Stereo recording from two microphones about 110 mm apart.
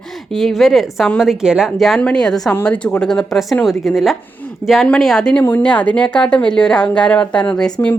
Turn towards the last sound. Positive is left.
turn(degrees=10)  # may be behind; listen again after turning